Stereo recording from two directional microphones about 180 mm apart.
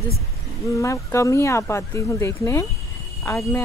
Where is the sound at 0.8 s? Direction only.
15° left (ahead or behind).